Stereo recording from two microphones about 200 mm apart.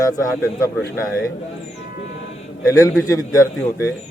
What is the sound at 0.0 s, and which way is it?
Speech, 15° left (ahead or behind).